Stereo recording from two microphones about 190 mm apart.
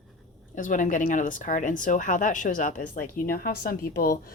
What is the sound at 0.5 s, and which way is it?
A woman's voice, 45° left (ahead or behind).